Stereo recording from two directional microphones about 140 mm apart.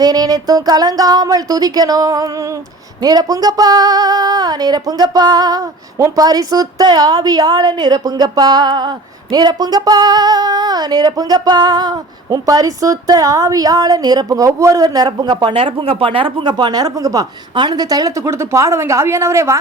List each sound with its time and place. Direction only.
0.0 s speech: 25° right (ahead or behind)